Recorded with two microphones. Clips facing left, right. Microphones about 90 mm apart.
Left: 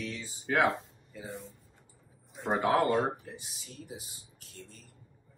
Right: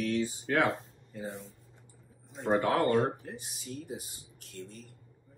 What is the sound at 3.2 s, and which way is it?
Speech, 45° right (ahead or behind).